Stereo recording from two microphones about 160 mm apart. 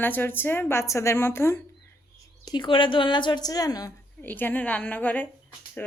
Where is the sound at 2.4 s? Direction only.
25° left (ahead or behind).